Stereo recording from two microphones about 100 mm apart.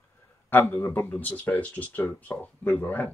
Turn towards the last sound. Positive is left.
turn(degrees=20)  # may be behind; listen again after turning